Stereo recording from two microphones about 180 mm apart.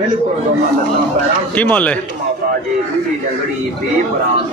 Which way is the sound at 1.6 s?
10° left (ahead or behind).